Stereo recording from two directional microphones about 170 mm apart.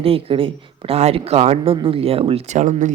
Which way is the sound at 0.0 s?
35° right (ahead or behind).